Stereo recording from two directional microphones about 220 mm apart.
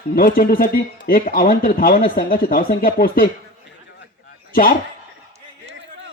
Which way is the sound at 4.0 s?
45° left (ahead or behind).